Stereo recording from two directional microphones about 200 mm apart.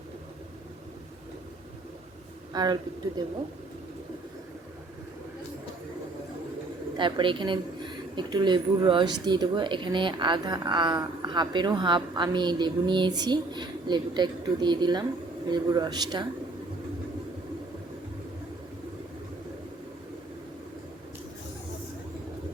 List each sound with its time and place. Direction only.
2.5 s a man's voice: 20° right (ahead or behind)
6.9 s a woman's voice: 25° right (ahead or behind)